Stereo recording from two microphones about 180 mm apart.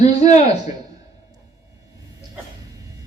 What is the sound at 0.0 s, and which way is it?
Speech, 40° left (ahead or behind).